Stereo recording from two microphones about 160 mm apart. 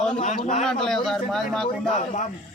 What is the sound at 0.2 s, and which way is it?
Speech, 45° left (ahead or behind).